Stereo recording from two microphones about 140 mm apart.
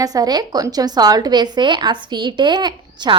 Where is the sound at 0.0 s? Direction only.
25° right (ahead or behind).